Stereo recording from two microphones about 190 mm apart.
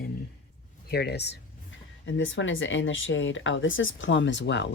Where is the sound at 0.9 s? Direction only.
55° left (ahead or behind).